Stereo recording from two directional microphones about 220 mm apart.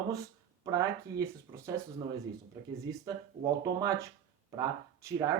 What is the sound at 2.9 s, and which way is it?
Speech, 15° right (ahead or behind).